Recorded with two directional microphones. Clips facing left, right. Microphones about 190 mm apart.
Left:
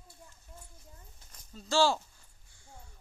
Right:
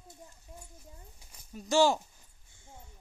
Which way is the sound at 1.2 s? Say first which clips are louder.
Right 5 dB; 10° right (ahead or behind).